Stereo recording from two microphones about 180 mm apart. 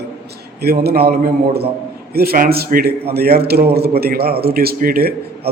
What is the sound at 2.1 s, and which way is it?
A man's voice, 60° right (ahead or behind).